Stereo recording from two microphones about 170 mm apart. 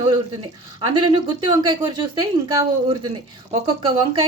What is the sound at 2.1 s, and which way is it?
Speech, 25° right (ahead or behind).